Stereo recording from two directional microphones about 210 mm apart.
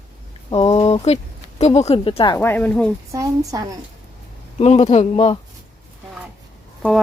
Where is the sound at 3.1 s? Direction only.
15° right (ahead or behind).